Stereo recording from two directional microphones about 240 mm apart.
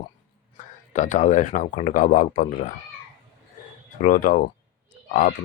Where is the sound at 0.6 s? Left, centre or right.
Left.